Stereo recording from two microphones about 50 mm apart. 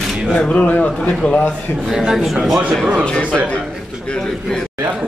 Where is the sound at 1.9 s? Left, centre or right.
Centre.